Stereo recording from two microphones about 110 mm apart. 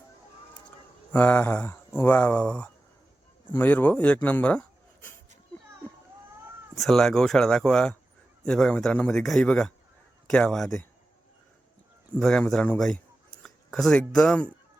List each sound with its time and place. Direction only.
1.1 s speech: 15° left (ahead or behind)
6.7 s a man's voice: centre (ahead or behind)
12.1 s speech: 5° left (ahead or behind)